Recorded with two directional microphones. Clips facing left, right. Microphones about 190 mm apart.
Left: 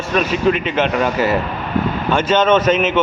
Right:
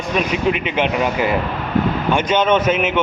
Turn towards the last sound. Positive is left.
turn(degrees=-10)  # may be behind; listen again after turning